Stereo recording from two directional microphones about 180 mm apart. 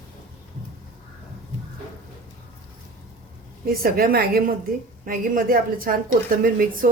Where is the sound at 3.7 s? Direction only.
55° right (ahead or behind).